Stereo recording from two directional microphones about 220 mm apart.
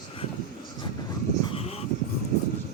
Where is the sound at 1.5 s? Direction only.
30° left (ahead or behind).